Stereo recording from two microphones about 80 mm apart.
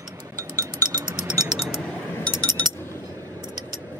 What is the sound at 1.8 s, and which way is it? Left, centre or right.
Chink, centre.